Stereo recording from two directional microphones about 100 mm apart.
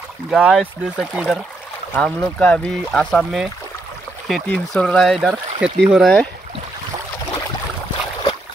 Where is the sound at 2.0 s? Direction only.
10° left (ahead or behind).